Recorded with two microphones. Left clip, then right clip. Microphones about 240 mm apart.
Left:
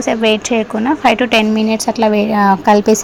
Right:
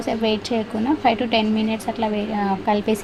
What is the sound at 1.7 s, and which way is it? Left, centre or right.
Speech, left.